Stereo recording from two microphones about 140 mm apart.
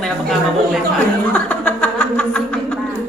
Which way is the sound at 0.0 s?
Centre (ahead or behind).